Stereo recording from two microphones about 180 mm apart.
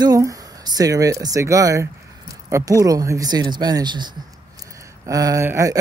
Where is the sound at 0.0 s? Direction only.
20° right (ahead or behind).